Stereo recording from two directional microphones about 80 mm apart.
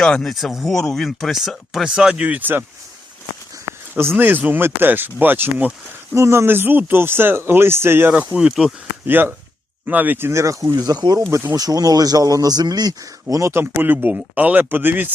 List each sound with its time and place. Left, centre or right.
0.0 s speech: centre; by 2.6 s right
3.9 s speech: right
6.1 s speech: right
8.3 s speech: centre
9.0 s speech: right
13.3 s speech: right
13.7 s speech: right